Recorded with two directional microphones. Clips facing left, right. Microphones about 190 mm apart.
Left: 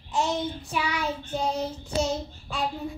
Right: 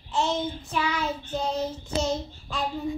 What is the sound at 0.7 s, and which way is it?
Child singing, 10° left (ahead or behind).